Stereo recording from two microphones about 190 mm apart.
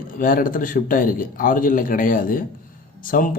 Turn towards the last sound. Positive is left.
turn(degrees=45)  # may be behind; listen again after turning